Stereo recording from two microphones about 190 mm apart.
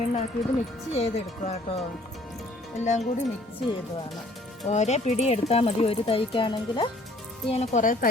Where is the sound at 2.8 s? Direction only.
40° left (ahead or behind).